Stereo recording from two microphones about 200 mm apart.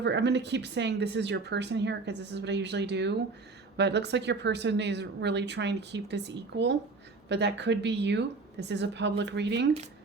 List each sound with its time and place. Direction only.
0.0 s speech: 60° right (ahead or behind)